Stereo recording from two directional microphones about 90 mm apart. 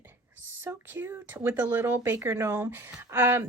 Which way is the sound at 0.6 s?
25° right (ahead or behind).